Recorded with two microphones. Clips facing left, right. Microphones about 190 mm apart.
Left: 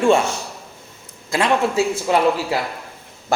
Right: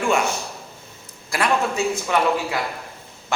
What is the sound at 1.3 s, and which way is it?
A man's voice, 25° left (ahead or behind).